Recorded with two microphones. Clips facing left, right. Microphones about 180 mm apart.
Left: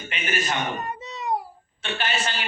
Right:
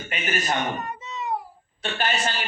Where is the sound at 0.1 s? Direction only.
40° right (ahead or behind).